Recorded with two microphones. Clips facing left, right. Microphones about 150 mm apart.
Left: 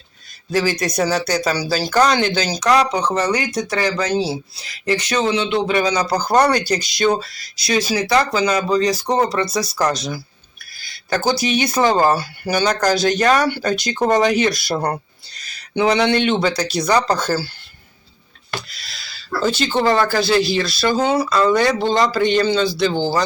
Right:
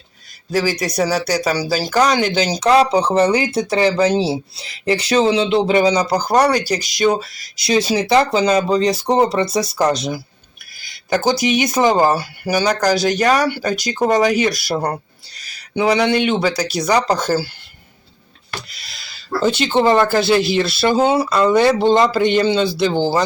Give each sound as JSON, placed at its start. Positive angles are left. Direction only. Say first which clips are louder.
{"t": 0.5, "sound": "speech", "louder": "even", "side_deg": -10}
{"t": 5.9, "sound": "speech", "louder": "right 1 dB", "side_deg": -15}
{"t": 7.7, "sound": "speech", "louder": "right 3 dB", "side_deg": -25}
{"t": 10.8, "sound": "a sound", "louder": "right 3 dB", "side_deg": -20}
{"t": 11.3, "sound": "speech", "louder": "right 1 dB", "side_deg": -15}
{"t": 19.0, "sound": "speech", "louder": "right 2 dB", "side_deg": -20}